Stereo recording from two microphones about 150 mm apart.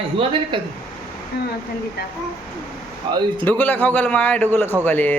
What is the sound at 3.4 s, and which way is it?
A man's voice, 10° left (ahead or behind).